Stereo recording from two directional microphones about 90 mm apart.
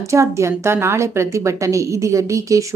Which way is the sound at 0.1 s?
35° right (ahead or behind).